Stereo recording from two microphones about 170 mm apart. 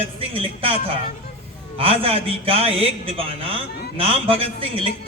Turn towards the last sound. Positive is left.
turn(degrees=-30)  # may be behind; listen again after turning